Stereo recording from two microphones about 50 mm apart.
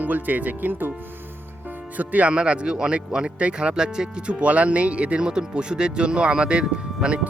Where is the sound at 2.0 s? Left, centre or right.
Right.